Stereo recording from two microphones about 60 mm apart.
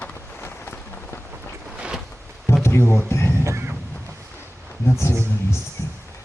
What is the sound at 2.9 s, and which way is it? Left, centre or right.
Speech, left.